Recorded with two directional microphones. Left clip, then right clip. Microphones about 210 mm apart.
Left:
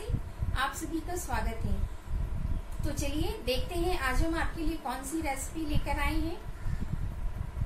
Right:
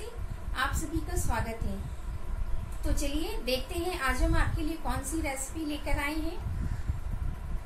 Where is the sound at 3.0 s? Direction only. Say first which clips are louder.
Even; centre (ahead or behind).